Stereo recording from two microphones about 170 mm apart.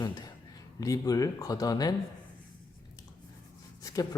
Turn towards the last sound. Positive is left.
turn(degrees=20)  # may be behind; listen again after turning